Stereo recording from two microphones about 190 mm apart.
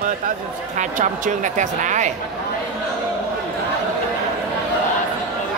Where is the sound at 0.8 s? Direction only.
40° right (ahead or behind).